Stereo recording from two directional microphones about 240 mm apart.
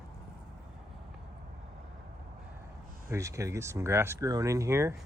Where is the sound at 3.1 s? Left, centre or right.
Centre.